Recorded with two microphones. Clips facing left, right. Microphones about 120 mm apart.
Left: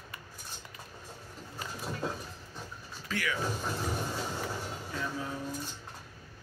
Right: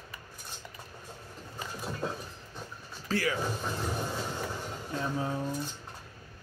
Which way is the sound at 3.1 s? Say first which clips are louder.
Right 5 dB; 35° right (ahead or behind).